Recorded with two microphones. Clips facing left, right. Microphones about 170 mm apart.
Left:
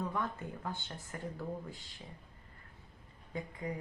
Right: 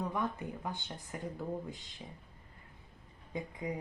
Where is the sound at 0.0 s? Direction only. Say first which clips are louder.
Right 2 dB; 15° right (ahead or behind).